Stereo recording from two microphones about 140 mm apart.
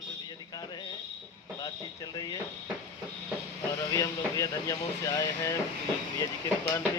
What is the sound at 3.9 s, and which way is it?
Speech, 25° left (ahead or behind).